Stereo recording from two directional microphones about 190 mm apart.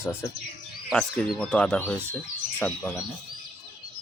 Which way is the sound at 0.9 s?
Centre (ahead or behind).